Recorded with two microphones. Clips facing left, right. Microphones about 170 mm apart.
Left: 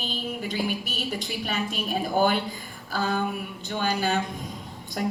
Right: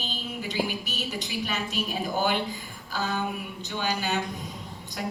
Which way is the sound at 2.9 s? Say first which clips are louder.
Left 3 dB; 50° left (ahead or behind).